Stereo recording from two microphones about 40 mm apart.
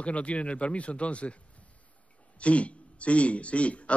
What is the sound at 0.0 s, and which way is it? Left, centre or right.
A man's voice, left.